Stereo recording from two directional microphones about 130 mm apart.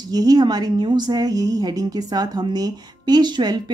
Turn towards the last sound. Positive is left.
turn(degrees=-35)  # may be behind; listen again after turning